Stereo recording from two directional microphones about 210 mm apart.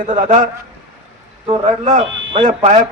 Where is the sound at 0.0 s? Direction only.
35° right (ahead or behind).